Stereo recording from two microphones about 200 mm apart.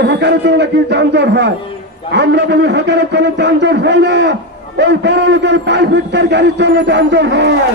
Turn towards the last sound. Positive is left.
turn(degrees=-60)  # may be behind; listen again after turning